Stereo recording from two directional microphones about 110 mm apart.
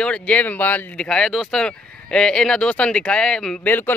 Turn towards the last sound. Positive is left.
turn(degrees=15)  # may be behind; listen again after turning